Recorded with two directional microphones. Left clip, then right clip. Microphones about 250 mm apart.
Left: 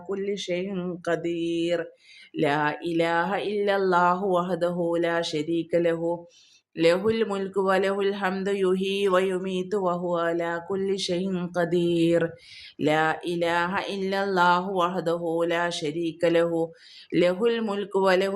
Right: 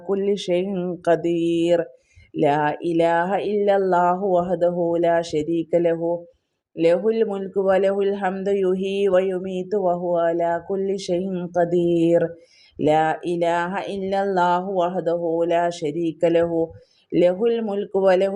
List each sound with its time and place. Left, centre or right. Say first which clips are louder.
0.1 s speech: right 7 dB; centre